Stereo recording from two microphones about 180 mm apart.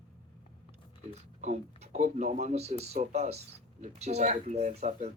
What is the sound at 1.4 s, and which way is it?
Speech, 40° right (ahead or behind).